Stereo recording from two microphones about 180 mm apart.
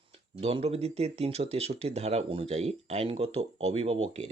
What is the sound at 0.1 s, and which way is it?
Speech, 30° right (ahead or behind).